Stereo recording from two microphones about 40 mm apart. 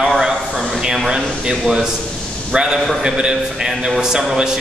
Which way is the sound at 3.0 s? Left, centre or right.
Centre.